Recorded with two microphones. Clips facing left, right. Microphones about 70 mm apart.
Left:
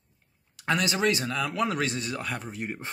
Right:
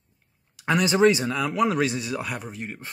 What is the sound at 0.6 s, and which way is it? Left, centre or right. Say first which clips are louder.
Speech: right 6 dB; centre.